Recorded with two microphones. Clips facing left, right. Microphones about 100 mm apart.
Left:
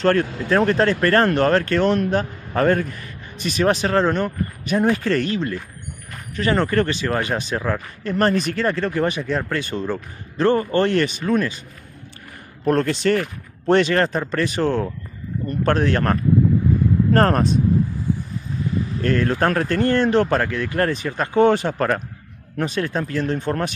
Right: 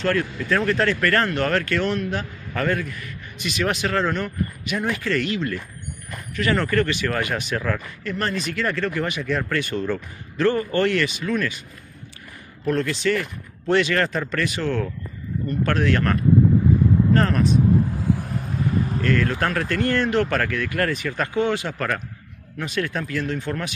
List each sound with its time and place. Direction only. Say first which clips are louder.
0.0 s speech: left 4 dB; 35° left (ahead or behind)
8.0 s speech: left 11 dB; 40° left (ahead or behind)
8.6 s speech: left 2 dB; 30° left (ahead or behind)
12.6 s speech: left 4 dB; 40° left (ahead or behind)
17.1 s speech: left 3 dB; 45° left (ahead or behind)
17.9 s vehicle: right 1 dB; 85° right; by 18.5 s 70° right (ahead or behind)
19.0 s speech: left 5 dB; 35° left (ahead or behind)
21.4 s speech: left 8 dB; 40° left (ahead or behind)